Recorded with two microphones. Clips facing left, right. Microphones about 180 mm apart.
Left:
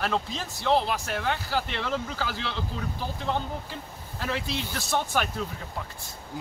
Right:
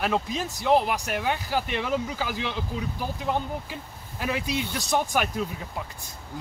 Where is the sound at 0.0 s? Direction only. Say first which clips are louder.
Right 3 dB; 15° right (ahead or behind).